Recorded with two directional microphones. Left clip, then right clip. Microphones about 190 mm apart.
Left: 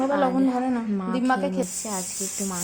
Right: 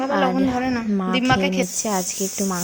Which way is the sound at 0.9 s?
25° right (ahead or behind).